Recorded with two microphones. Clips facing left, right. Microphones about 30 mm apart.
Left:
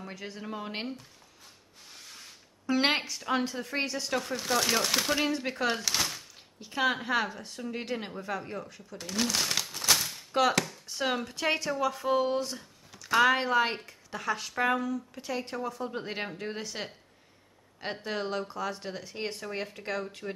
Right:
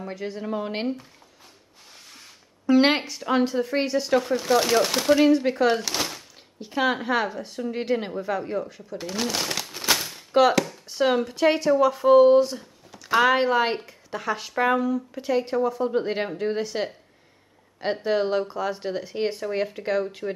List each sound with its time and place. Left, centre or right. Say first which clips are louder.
0.0 s speech: right 9 dB; centre
2.6 s speech: right 8 dB; centre
15.8 s speech: right 10 dB; centre